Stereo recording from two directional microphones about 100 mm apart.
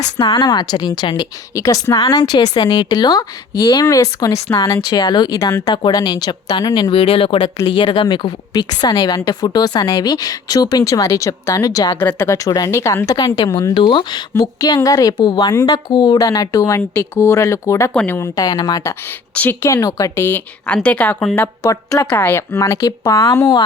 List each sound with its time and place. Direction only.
0.3 s a woman's voice: 45° left (ahead or behind)
5.4 s speech: 30° left (ahead or behind)
5.6 s speech: 50° left (ahead or behind)
6.9 s a woman's voice: 65° left (ahead or behind); by 11.9 s 35° left (ahead or behind)
11.9 s a woman's voice: 25° left (ahead or behind)
17.9 s speech: 20° left (ahead or behind)
18.3 s a woman's voice: 40° left (ahead or behind)
19.3 s speech: 15° left (ahead or behind)
19.6 s a woman's voice: 35° left (ahead or behind)
20.2 s a woman's voice: 20° left (ahead or behind)
21.7 s a woman's voice: 35° left (ahead or behind)
22.1 s a woman's voice: 20° left (ahead or behind); by 23.6 s 40° left (ahead or behind)